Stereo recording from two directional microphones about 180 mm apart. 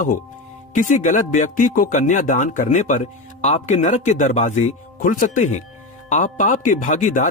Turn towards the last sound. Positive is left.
turn(degrees=45)  # may be behind; listen again after turning